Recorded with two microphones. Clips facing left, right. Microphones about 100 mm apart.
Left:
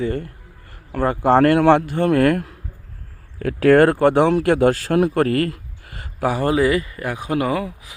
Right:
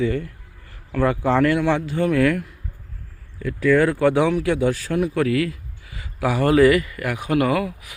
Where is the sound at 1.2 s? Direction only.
50° left (ahead or behind).